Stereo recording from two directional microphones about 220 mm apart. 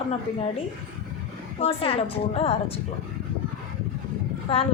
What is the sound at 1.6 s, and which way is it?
Speech, 25° left (ahead or behind).